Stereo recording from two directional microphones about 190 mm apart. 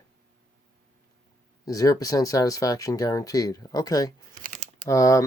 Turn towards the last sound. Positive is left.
turn(degrees=15)  # may be behind; listen again after turning